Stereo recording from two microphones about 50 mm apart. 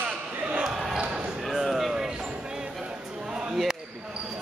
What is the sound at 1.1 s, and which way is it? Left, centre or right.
Basketball bounce, right.